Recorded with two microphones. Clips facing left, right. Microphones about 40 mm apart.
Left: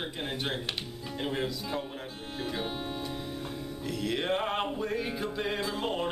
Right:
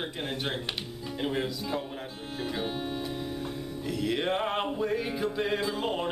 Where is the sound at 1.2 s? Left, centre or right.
Centre.